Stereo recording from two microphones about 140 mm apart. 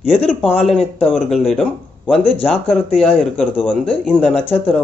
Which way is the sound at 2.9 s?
5° left (ahead or behind).